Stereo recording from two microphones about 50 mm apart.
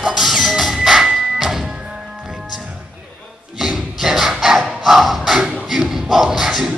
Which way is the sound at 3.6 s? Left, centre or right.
Centre.